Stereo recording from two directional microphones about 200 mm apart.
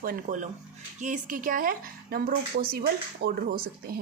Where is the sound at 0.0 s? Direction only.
45° right (ahead or behind).